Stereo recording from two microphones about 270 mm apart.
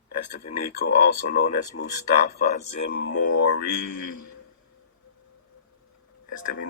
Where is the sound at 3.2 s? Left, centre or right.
Left.